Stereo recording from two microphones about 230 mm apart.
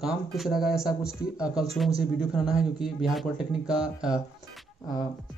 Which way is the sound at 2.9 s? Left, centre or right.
Centre.